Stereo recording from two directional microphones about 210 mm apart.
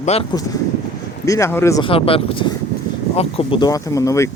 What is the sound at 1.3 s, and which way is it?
Speech, 15° left (ahead or behind).